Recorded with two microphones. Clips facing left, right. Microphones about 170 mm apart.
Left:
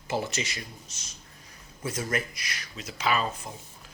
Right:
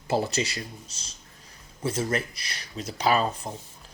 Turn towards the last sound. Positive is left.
turn(degrees=-35)  # may be behind; listen again after turning